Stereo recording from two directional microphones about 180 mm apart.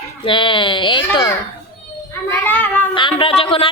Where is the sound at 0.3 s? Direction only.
25° left (ahead or behind).